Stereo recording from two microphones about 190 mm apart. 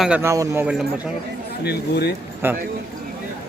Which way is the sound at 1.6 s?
60° left (ahead or behind).